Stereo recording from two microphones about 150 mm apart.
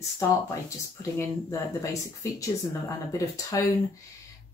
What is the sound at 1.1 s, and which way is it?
Speech, 20° left (ahead or behind).